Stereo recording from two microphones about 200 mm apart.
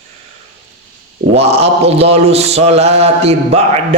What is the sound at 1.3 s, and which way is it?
Mantra, 30° right (ahead or behind).